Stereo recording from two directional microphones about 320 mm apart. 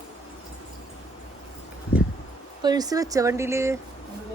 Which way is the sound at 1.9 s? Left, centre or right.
Left.